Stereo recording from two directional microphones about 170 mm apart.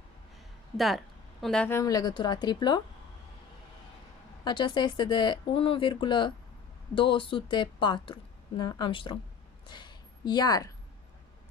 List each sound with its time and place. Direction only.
0.7 s speech: centre (ahead or behind)
1.8 s a woman's voice: 20° left (ahead or behind)
4.5 s a woman's voice: 25° left (ahead or behind)
9.7 s a sound: 25° left (ahead or behind)